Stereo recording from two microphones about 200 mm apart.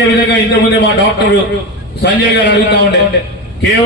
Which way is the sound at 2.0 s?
60° left (ahead or behind).